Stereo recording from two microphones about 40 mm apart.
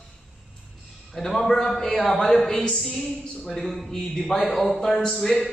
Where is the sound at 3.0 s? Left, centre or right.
Left.